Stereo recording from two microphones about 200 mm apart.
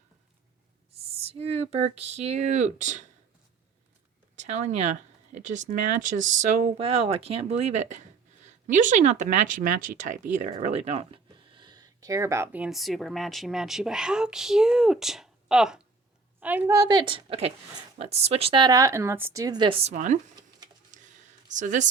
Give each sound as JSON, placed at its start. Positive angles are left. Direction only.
{"t": 1.2, "sound": "speech", "side_deg": -30}
{"t": 4.4, "sound": "speech", "side_deg": -35}
{"t": 20.9, "sound": "whispering", "side_deg": -40}
{"t": 21.4, "sound": "speech", "side_deg": -40}